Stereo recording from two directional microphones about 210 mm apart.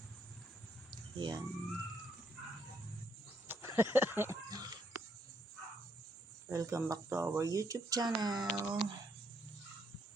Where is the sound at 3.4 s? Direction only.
10° right (ahead or behind).